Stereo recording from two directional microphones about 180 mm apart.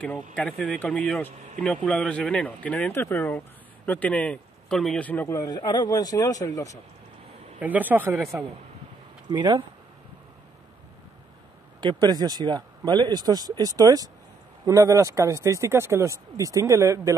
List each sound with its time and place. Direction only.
0.4 s speech: 10° left (ahead or behind)
7.6 s speech: 10° right (ahead or behind)
11.8 s speech: 25° right (ahead or behind)